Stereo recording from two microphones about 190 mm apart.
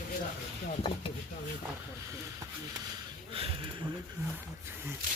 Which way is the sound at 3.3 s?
30° right (ahead or behind).